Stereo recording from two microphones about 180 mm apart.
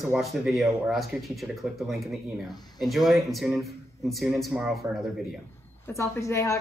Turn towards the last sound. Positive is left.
turn(degrees=15)  # may be behind; listen again after turning